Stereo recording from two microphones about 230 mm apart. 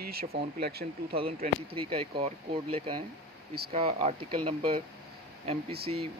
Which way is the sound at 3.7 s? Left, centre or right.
Right.